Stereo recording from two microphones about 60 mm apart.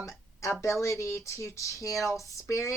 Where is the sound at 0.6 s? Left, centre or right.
Left.